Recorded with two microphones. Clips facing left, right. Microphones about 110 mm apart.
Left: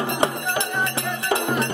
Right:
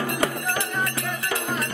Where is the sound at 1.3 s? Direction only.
25° left (ahead or behind).